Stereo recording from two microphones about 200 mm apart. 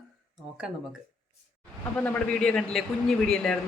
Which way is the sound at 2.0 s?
5° left (ahead or behind).